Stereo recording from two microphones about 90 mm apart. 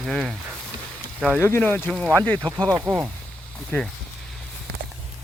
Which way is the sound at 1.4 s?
20° left (ahead or behind).